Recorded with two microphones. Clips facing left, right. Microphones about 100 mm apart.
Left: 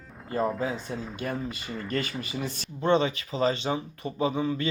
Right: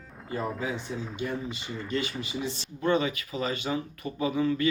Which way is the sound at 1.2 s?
50° left (ahead or behind).